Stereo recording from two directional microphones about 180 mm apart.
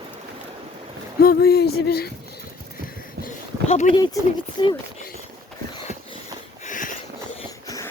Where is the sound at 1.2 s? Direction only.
60° left (ahead or behind).